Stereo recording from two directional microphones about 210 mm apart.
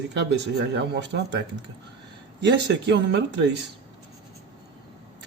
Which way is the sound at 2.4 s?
55° right (ahead or behind).